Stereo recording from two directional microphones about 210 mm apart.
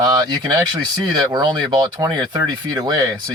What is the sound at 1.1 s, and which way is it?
Speech, 20° right (ahead or behind).